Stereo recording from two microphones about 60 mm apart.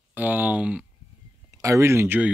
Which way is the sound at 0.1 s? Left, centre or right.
Right.